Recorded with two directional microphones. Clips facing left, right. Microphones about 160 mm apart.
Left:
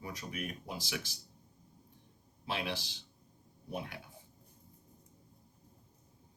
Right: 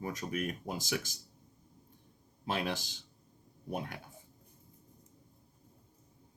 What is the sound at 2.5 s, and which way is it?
Speech, 45° right (ahead or behind).